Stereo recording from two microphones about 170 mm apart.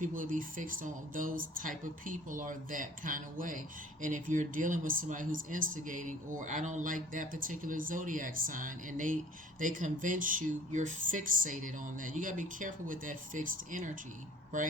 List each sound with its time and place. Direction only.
0.0 s speech: 50° right (ahead or behind)